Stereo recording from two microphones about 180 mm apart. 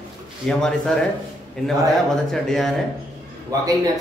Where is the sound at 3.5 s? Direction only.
20° right (ahead or behind).